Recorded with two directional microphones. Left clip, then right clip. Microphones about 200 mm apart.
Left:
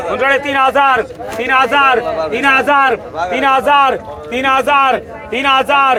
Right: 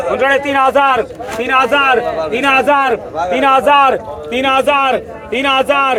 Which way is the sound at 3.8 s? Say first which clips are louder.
Right 1 dB; 20° left (ahead or behind).